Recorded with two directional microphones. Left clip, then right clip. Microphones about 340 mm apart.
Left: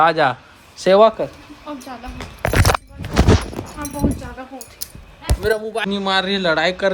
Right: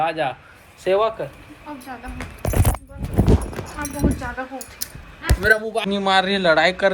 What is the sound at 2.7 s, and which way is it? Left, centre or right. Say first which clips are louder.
Keys jangling: left 7 dB; right.